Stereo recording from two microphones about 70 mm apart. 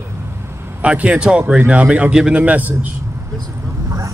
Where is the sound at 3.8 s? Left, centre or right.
Right.